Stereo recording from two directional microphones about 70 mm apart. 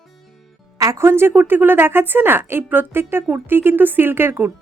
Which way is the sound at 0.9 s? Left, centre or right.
Right.